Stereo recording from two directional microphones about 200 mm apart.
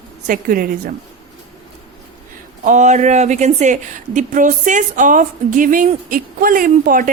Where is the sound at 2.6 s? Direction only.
35° right (ahead or behind).